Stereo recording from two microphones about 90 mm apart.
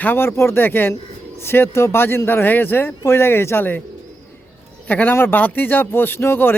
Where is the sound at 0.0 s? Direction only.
25° left (ahead or behind).